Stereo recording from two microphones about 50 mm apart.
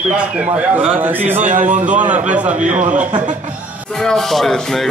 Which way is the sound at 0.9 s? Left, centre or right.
Right.